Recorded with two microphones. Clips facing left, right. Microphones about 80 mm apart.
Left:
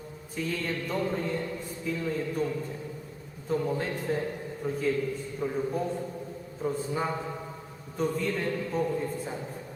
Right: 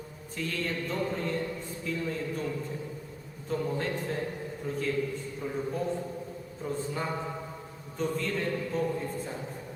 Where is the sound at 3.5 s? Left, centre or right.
Centre.